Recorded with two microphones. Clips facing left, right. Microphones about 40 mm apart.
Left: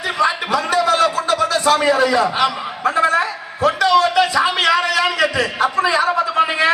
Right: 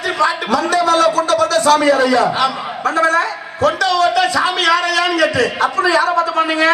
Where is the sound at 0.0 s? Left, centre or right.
Centre.